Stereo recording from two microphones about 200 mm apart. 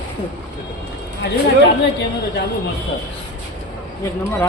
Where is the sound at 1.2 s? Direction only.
65° left (ahead or behind).